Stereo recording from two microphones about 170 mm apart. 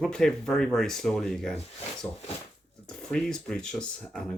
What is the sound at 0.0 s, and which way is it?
Speech, 5° left (ahead or behind).